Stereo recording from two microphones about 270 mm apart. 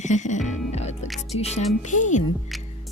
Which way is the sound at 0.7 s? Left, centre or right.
Left.